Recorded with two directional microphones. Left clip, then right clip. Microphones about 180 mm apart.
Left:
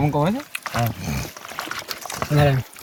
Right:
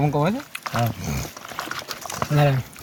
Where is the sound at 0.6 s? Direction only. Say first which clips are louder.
Even; 10° right (ahead or behind).